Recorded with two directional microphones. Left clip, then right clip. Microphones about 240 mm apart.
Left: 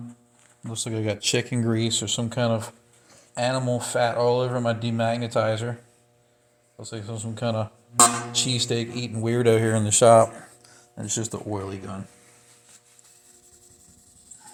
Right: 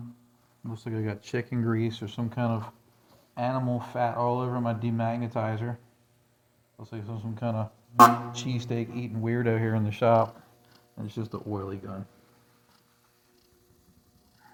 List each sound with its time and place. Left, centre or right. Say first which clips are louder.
0.7 s speech: left 7 dB; left
6.7 s speech: left 6 dB; left